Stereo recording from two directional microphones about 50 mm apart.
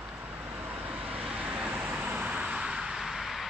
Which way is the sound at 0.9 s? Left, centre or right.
Right.